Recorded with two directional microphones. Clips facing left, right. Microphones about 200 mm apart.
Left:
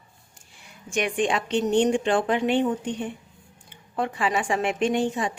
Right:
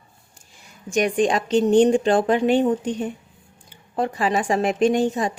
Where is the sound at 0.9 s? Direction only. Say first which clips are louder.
Right 5 dB; 40° right (ahead or behind).